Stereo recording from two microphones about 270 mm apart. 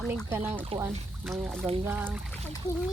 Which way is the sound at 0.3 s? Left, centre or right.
Centre.